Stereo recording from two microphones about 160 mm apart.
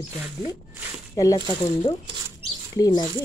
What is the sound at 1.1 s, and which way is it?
Speech, 20° left (ahead or behind).